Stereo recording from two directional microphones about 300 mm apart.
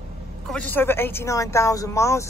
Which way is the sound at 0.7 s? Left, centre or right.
Centre.